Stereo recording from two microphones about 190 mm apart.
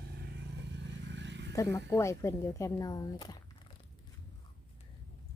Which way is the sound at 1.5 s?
15° left (ahead or behind).